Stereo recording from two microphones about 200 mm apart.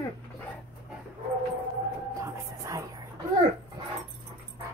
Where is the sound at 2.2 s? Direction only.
15° right (ahead or behind).